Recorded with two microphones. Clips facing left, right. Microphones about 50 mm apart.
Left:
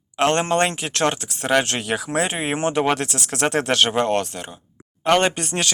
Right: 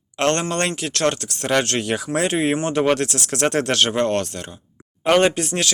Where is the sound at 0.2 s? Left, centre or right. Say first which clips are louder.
Left 2 dB; centre.